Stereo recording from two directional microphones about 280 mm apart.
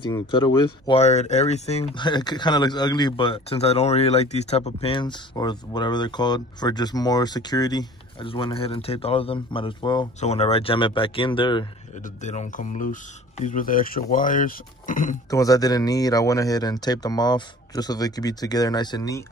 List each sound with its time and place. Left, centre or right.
0.0 s speech: centre
15.2 s speech: centre